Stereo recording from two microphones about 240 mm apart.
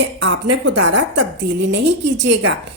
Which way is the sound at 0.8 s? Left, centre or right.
Right.